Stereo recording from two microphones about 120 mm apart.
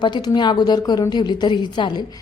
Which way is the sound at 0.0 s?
35° left (ahead or behind).